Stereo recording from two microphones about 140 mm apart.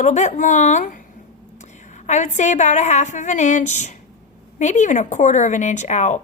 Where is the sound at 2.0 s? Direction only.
60° left (ahead or behind).